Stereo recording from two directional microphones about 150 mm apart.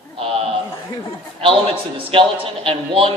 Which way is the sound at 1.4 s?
35° right (ahead or behind).